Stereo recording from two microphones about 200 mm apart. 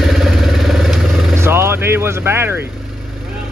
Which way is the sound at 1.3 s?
10° right (ahead or behind).